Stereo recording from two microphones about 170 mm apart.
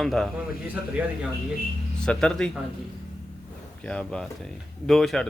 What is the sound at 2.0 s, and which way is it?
Speech, 5° left (ahead or behind).